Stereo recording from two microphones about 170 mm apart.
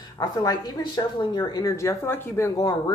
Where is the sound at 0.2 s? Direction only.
25° left (ahead or behind).